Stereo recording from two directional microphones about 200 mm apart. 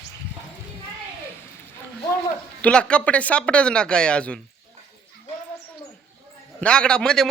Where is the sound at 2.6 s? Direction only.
5° left (ahead or behind).